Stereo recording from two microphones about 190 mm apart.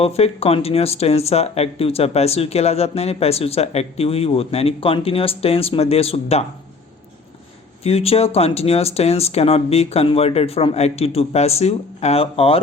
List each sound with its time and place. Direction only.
0.0 s speech: 30° left (ahead or behind)
7.9 s speech: 30° left (ahead or behind)